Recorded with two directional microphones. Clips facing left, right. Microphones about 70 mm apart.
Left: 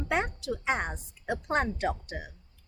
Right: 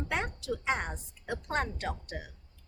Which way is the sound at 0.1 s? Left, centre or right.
Centre.